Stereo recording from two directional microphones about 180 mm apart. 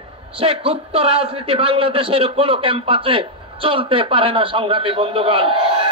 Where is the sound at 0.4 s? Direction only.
30° right (ahead or behind).